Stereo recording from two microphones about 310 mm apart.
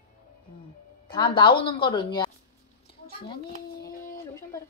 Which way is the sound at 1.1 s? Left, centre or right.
Centre.